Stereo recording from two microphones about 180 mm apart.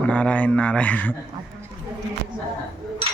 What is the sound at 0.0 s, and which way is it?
A man's voice, 5° left (ahead or behind).